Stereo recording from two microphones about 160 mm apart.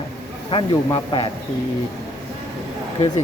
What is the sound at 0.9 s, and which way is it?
Speech, 30° left (ahead or behind).